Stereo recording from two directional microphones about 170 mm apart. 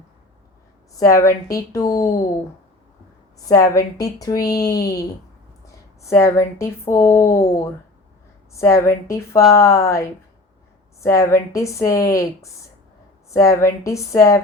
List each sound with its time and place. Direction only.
0.9 s a woman's voice: 20° left (ahead or behind)
3.5 s a woman's voice: 20° left (ahead or behind)
6.1 s speech: 15° left (ahead or behind)